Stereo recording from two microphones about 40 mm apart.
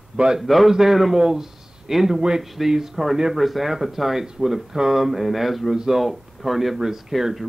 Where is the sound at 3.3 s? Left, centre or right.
Centre.